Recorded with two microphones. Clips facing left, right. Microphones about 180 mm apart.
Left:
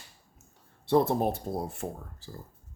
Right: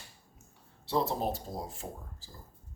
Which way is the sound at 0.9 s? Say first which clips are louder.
Left 6 dB; 55° left (ahead or behind).